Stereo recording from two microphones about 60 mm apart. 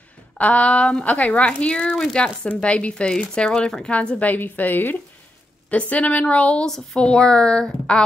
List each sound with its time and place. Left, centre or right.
0.4 s a woman's voice: left
5.7 s a woman's voice: left